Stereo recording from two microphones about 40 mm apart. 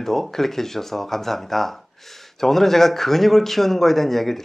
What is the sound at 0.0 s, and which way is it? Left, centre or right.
Speech, centre.